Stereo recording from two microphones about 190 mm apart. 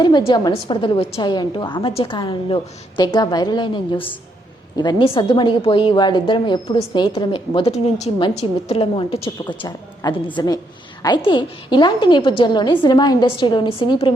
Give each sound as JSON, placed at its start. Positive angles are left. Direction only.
{"t": 0.0, "sound": "a woman's voice", "side_deg": 25}